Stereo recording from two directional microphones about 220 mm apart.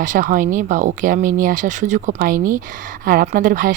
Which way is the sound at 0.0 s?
35° right (ahead or behind).